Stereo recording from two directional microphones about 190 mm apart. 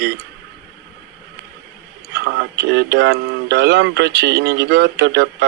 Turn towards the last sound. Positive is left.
turn(degrees=-60)  # may be behind; listen again after turning